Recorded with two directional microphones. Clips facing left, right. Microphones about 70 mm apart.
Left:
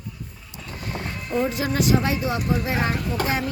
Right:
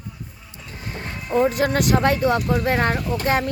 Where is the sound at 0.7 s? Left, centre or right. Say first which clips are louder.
Left 1 dB; right.